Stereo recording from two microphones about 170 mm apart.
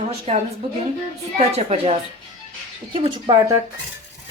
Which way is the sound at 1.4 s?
40° right (ahead or behind).